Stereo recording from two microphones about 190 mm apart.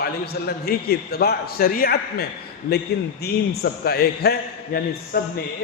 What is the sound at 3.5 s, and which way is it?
A man's voice, 55° left (ahead or behind).